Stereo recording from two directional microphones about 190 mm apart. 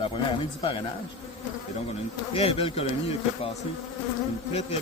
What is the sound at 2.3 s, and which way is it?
Speech, 30° left (ahead or behind).